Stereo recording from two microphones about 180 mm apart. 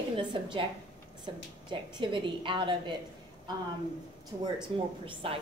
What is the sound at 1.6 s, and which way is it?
A woman's voice, 25° right (ahead or behind).